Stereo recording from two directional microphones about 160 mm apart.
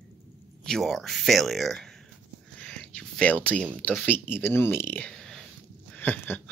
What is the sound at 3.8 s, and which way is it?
Speech, 10° left (ahead or behind).